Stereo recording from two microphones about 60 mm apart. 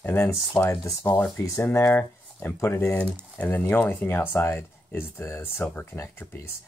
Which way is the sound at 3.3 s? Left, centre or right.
Left.